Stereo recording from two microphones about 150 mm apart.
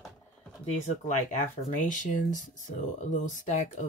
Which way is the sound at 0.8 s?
55° left (ahead or behind).